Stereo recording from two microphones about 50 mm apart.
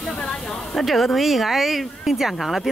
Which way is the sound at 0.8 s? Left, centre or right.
Centre.